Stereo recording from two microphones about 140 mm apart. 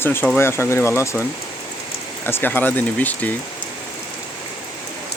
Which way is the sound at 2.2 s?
15° left (ahead or behind).